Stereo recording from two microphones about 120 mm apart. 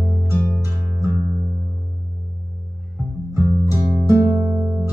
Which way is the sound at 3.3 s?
20° right (ahead or behind).